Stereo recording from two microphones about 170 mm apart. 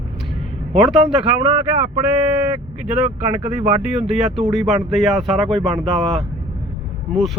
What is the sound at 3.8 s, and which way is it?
Speech, 5° right (ahead or behind).